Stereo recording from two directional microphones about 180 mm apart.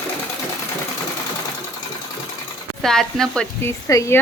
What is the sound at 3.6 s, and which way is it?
Speech, 15° left (ahead or behind).